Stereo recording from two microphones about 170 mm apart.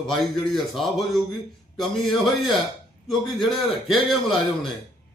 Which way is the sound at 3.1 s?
Centre (ahead or behind).